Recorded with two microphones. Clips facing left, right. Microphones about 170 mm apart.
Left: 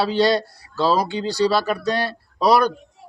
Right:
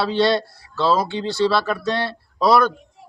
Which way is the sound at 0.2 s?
15° left (ahead or behind).